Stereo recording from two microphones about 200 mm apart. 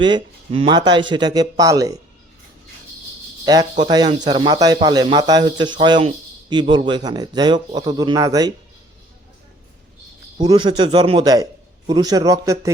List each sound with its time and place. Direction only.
0.0 s speech: 25° right (ahead or behind)
3.4 s speech: 20° right (ahead or behind)
10.3 s a man's voice: 20° right (ahead or behind)